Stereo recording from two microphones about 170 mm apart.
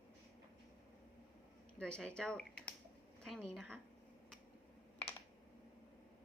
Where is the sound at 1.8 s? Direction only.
5° left (ahead or behind).